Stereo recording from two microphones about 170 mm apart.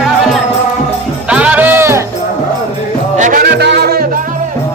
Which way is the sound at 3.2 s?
55° right (ahead or behind).